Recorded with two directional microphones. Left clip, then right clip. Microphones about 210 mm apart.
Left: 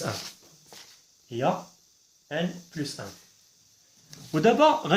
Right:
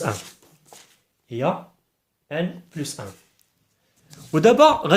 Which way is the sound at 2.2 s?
40° right (ahead or behind).